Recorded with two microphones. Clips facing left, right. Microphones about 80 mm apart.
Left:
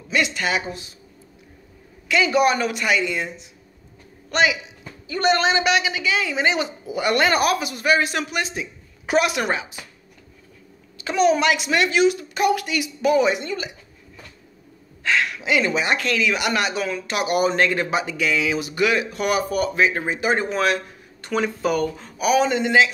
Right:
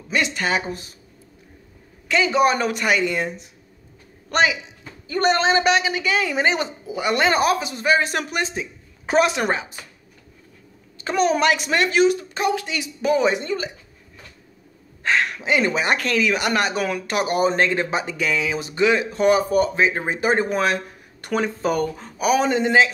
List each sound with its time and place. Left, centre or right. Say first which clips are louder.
0.1 s speech: even; right
2.0 s speech: even; right
4.3 s a man's voice: even; right
6.9 s speech: even; centre
8.1 s a woman's voice: right 1 dB; right
11.1 s speech: left 1 dB; right
15.0 s speech: right 1 dB; right
17.2 s speech: even; right
20.1 s speech: right 2 dB; right